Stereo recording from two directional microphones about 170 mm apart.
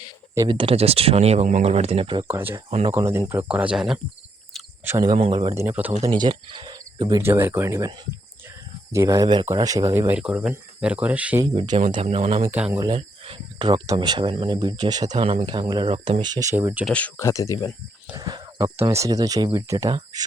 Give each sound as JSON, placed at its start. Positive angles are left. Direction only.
{"t": 0.3, "sound": "speech", "side_deg": -30}
{"t": 2.2, "sound": "speech", "side_deg": -10}
{"t": 2.6, "sound": "speech", "side_deg": -35}
{"t": 2.9, "sound": "speech", "side_deg": -15}
{"t": 4.9, "sound": "speech", "side_deg": -20}
{"t": 5.1, "sound": "speech", "side_deg": -35}
{"t": 5.5, "sound": "speech", "side_deg": -15}
{"t": 5.9, "sound": "speech", "side_deg": -35}
{"t": 11.4, "sound": "speech", "side_deg": -30}
{"t": 12.4, "sound": "speech", "side_deg": -10}
{"t": 12.8, "sound": "speech", "side_deg": -30}
{"t": 16.8, "sound": "speech", "side_deg": 10}
{"t": 18.1, "sound": "speech", "side_deg": -25}